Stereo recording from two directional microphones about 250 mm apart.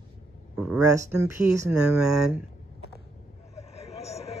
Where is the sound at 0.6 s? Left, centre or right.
Centre.